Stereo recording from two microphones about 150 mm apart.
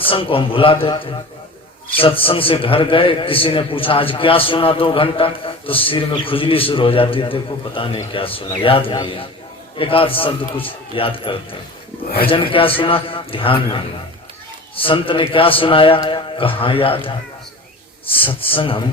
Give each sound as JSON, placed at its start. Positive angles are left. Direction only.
{"t": 0.0, "sound": "a man's voice", "side_deg": 35}